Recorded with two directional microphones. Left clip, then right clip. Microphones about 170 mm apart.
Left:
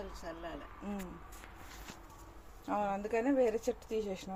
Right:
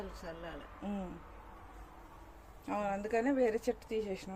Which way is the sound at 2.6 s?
10° right (ahead or behind).